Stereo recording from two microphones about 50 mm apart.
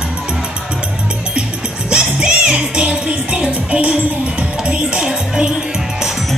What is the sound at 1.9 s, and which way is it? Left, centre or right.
Music, centre.